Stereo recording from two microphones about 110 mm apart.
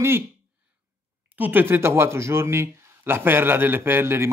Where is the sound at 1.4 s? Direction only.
15° right (ahead or behind).